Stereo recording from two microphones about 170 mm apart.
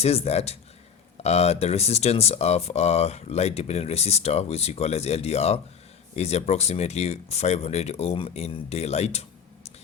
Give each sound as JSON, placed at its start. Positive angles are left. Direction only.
{"t": 0.0, "sound": "speech", "side_deg": 35}